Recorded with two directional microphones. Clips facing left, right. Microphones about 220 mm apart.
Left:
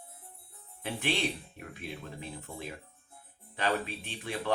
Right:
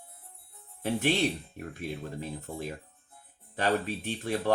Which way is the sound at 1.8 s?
40° right (ahead or behind).